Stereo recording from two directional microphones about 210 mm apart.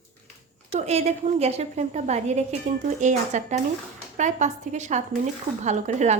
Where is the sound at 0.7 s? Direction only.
30° right (ahead or behind).